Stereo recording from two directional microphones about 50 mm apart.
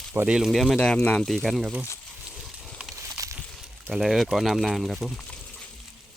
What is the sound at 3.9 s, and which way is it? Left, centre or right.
Speech, centre.